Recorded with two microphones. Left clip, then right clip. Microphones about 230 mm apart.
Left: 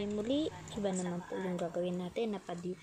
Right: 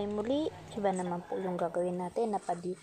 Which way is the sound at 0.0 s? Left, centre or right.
Centre.